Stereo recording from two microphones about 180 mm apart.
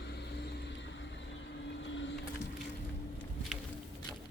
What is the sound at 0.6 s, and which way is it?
Vehicle, 90° left.